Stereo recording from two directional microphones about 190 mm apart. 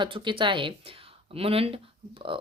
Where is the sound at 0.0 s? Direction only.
25° right (ahead or behind).